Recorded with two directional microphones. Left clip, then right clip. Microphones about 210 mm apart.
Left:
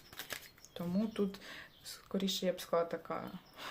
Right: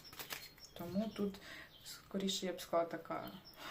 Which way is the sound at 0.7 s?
50° left (ahead or behind).